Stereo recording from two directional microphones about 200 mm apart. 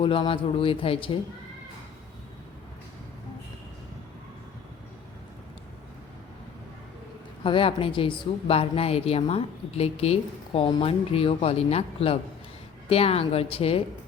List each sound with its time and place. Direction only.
0.0 s a woman's voice: 25° left (ahead or behind)
7.4 s a woman's voice: 25° left (ahead or behind)